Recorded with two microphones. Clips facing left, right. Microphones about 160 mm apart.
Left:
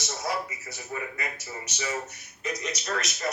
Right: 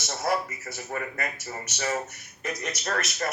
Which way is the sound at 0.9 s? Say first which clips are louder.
Right 2 dB; 50° right (ahead or behind).